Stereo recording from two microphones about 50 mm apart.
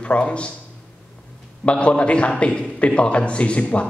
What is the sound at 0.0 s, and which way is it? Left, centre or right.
Speech, left.